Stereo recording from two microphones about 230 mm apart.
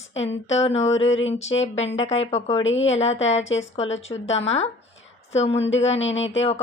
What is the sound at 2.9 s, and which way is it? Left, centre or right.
Speech, left.